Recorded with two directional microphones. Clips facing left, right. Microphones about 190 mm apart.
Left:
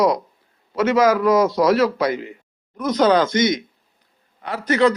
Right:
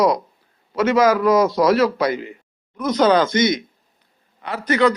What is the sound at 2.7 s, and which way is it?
Speech, 45° left (ahead or behind).